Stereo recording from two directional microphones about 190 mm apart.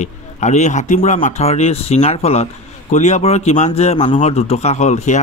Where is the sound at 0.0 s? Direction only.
40° left (ahead or behind).